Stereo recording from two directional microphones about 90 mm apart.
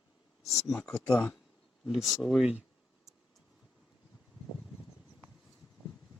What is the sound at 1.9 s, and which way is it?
Speech, centre (ahead or behind).